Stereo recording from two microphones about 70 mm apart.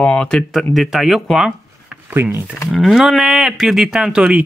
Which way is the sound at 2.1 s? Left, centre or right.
Right.